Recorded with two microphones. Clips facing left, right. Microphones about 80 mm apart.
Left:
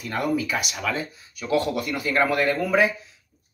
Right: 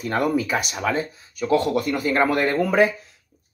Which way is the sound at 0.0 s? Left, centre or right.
Right.